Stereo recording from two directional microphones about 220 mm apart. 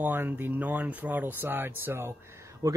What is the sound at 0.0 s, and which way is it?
Speech, 10° right (ahead or behind).